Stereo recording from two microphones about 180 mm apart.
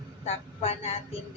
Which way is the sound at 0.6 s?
35° left (ahead or behind).